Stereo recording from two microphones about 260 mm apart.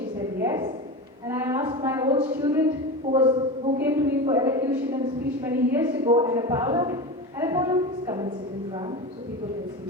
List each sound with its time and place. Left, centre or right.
0.4 s a sound: centre
2.4 s a woman's voice: centre
3.1 s a woman's voice: right